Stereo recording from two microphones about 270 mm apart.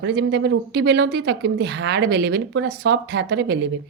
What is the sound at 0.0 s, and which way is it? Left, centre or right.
A woman's voice, right.